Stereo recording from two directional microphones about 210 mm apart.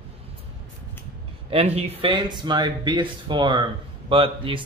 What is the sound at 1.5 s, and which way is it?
Speech, 30° right (ahead or behind).